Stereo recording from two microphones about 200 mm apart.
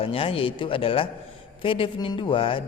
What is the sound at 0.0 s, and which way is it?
A man's voice, 30° left (ahead or behind).